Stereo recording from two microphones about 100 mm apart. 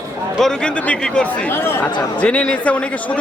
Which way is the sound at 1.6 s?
25° left (ahead or behind).